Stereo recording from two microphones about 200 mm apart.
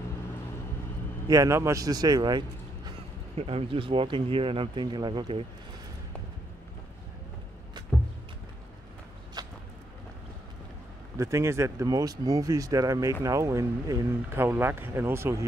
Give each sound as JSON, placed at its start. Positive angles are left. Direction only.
{"t": 1.2, "sound": "a man's voice", "side_deg": -15}
{"t": 11.1, "sound": "speech", "side_deg": -15}